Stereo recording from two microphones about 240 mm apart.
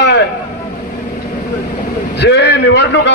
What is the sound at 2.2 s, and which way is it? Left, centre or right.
Speech, left.